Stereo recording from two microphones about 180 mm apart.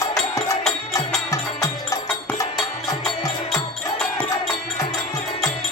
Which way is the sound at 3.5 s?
5° left (ahead or behind).